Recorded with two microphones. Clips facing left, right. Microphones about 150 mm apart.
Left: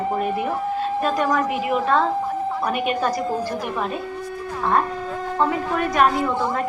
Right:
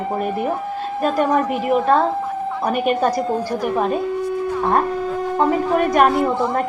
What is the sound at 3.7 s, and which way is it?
Speech, 45° right (ahead or behind).